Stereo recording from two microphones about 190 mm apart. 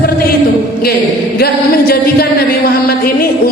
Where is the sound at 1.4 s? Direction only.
55° left (ahead or behind).